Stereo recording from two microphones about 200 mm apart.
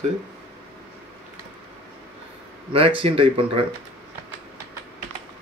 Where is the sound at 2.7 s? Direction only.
25° right (ahead or behind).